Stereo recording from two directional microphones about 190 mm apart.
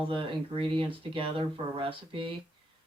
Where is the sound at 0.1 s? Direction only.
30° right (ahead or behind).